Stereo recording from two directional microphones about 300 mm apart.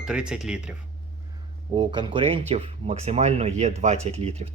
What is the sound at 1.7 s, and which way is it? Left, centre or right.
Speech, centre.